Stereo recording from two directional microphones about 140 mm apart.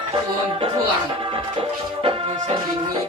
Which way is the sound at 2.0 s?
40° right (ahead or behind).